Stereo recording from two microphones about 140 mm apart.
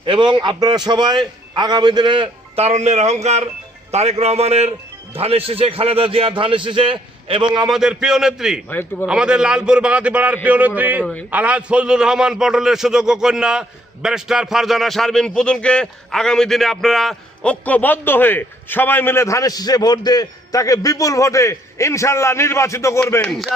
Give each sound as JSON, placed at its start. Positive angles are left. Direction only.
{"t": 0.0, "sound": "a man's voice", "side_deg": -35}
{"t": 2.6, "sound": "a man's voice", "side_deg": -50}
{"t": 7.7, "sound": "a man's voice", "side_deg": -5}
{"t": 8.7, "sound": "a man's voice", "side_deg": 15}
{"t": 9.0, "sound": "a man's voice", "side_deg": -5}
{"t": 11.0, "sound": "a man's voice", "side_deg": 10}
{"t": 11.3, "sound": "a man's voice", "side_deg": -10}
{"t": 23.2, "sound": "a man's voice", "side_deg": 5}